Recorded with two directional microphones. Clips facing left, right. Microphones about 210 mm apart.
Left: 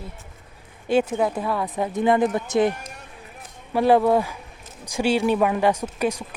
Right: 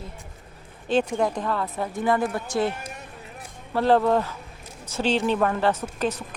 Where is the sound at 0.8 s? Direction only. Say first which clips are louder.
Left 2 dB; 10° left (ahead or behind).